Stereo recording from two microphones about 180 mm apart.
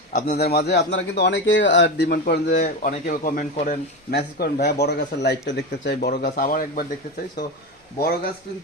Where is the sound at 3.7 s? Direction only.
60° left (ahead or behind).